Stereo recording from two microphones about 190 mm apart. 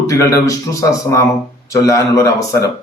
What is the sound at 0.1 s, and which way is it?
Speech, 15° left (ahead or behind).